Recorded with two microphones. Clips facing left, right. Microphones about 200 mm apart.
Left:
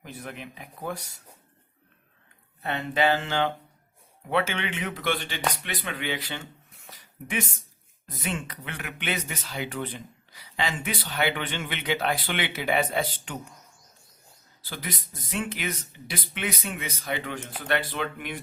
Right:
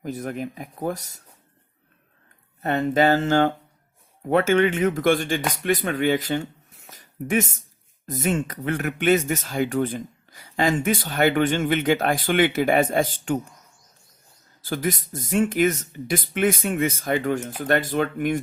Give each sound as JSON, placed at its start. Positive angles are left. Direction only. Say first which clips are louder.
{"t": 0.0, "sound": "speech", "louder": "right 10 dB", "side_deg": -45}
{"t": 2.6, "sound": "speech", "louder": "right 6 dB", "side_deg": -45}
{"t": 14.6, "sound": "speech", "louder": "right 11 dB", "side_deg": -45}